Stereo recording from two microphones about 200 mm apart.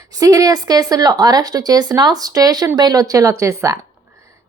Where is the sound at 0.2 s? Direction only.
15° right (ahead or behind).